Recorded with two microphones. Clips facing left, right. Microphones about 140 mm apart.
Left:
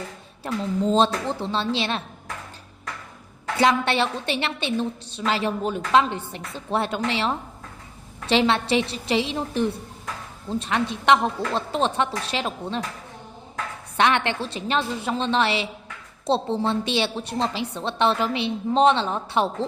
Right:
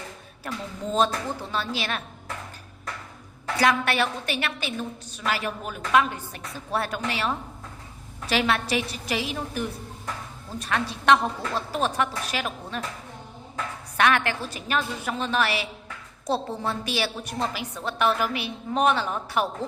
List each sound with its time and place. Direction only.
0.4 s a woman's voice: 30° left (ahead or behind)
3.6 s a woman's voice: 25° left (ahead or behind)
13.9 s a woman's voice: 25° left (ahead or behind)